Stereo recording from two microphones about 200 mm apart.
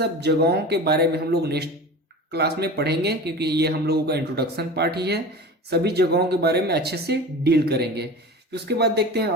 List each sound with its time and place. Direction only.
0.0 s speech: 55° right (ahead or behind)